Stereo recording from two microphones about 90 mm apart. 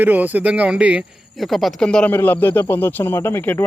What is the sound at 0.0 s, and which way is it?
Speech, 20° right (ahead or behind).